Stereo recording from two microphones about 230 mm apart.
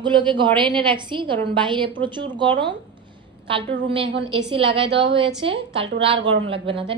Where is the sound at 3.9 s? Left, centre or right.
Right.